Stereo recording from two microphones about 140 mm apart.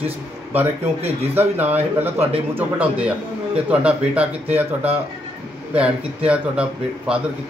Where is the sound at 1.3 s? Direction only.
15° right (ahead or behind).